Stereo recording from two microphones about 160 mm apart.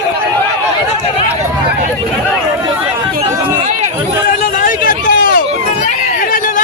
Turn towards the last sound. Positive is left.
turn(degrees=65)  # may be behind; listen again after turning